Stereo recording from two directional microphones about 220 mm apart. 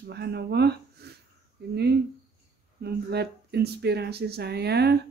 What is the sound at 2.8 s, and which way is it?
Speech, 45° right (ahead or behind).